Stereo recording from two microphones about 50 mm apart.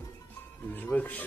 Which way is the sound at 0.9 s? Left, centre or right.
Left.